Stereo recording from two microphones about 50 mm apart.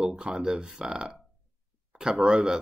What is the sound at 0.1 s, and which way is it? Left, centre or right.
Speech, centre.